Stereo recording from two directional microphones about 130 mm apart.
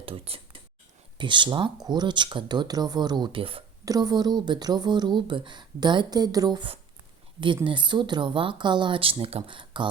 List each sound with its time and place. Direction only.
0.0 s a sound: 45° right (ahead or behind)
1.2 s speech: 40° right (ahead or behind)
3.8 s speech: 30° right (ahead or behind)